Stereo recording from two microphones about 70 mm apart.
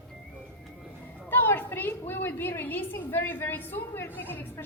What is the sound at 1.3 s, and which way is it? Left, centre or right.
A woman's voice, left.